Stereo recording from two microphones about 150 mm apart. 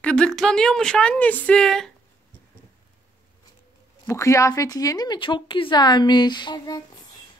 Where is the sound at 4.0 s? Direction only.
20° left (ahead or behind).